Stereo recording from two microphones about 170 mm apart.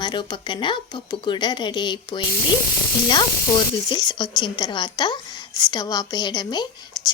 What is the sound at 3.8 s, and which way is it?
Speech, 25° left (ahead or behind).